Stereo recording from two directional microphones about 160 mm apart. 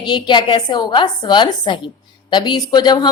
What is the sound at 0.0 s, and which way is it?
Speech, 30° left (ahead or behind).